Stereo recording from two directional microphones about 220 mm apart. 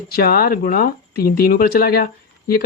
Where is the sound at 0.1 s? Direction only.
45° left (ahead or behind).